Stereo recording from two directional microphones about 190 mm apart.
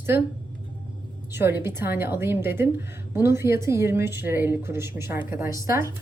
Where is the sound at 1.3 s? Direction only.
10° right (ahead or behind).